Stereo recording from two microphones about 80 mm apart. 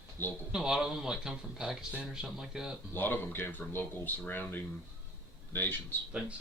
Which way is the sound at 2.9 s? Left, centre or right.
Left.